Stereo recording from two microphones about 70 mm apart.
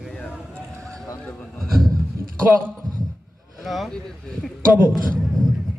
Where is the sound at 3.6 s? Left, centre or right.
Centre.